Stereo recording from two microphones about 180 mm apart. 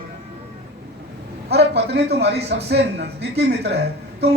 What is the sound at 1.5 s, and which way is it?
A man's voice, 65° right (ahead or behind).